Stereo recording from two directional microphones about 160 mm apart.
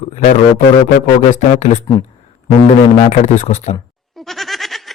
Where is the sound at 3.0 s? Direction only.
45° left (ahead or behind).